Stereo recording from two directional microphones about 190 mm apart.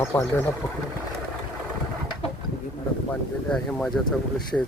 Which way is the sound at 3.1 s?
5° left (ahead or behind).